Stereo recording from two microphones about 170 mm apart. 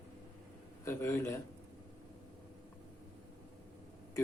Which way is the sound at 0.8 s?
15° left (ahead or behind).